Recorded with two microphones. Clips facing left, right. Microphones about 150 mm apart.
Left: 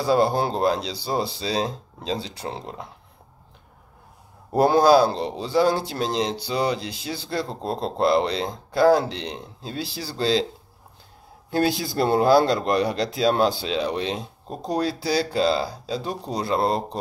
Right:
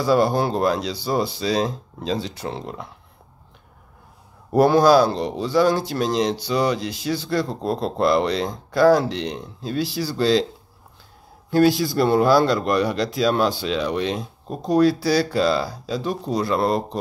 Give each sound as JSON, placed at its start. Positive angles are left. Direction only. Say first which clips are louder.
{"t": 0.0, "sound": "speech", "louder": "right 2 dB", "side_deg": 30}
{"t": 4.6, "sound": "speech", "louder": "right 2 dB", "side_deg": 30}
{"t": 11.5, "sound": "speech", "louder": "right 5 dB", "side_deg": 30}